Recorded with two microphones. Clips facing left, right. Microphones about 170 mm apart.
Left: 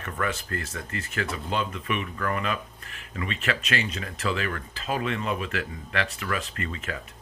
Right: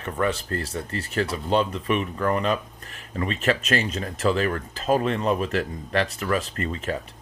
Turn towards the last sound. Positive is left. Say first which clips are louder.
# right 6 dB
turn(degrees=-35)  # may be behind; listen again after turning